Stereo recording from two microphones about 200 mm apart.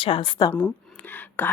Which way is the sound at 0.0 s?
25° left (ahead or behind).